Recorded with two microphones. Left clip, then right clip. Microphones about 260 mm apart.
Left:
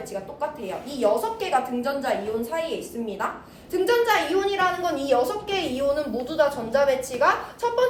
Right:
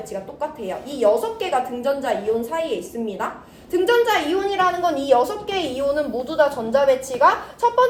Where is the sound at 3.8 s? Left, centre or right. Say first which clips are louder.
Right 3 dB; right.